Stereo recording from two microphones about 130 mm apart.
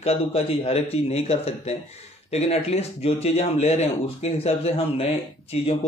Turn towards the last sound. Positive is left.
turn(degrees=50)  # may be behind; listen again after turning